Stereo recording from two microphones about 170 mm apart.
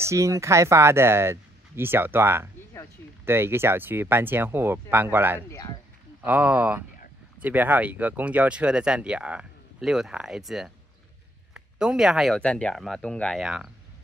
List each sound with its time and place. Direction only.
0.0 s speech: 20° right (ahead or behind)
5.5 s speech: 20° left (ahead or behind)
6.2 s speech: 10° right (ahead or behind)